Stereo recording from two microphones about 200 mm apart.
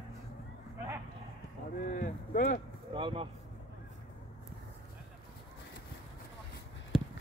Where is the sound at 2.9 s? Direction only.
25° right (ahead or behind).